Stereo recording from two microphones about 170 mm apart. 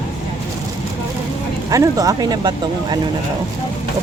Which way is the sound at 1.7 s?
20° right (ahead or behind).